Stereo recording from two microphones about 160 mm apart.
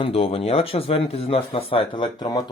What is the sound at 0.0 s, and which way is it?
Speech, 35° left (ahead or behind).